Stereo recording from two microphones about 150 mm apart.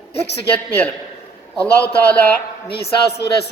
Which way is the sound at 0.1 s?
90° left.